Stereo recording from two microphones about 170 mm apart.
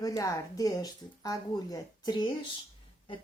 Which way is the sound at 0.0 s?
20° left (ahead or behind).